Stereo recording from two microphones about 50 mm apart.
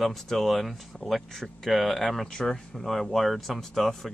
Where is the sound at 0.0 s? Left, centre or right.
Centre.